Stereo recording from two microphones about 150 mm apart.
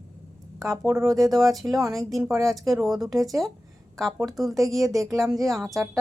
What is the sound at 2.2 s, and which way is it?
Speech, 20° right (ahead or behind).